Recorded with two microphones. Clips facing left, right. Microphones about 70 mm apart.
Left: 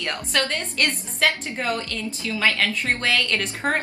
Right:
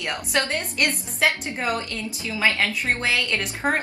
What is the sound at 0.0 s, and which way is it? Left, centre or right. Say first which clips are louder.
A woman's voice: even; centre.